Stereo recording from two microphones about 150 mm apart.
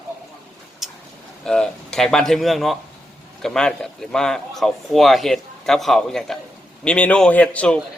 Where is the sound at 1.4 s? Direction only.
5° left (ahead or behind).